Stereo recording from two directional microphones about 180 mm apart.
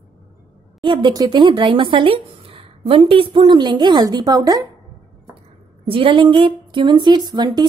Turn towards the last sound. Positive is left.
turn(degrees=-25)  # may be behind; listen again after turning